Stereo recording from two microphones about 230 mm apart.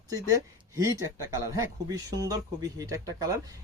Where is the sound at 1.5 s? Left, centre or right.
Centre.